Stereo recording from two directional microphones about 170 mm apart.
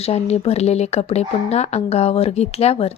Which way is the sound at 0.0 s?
35° left (ahead or behind).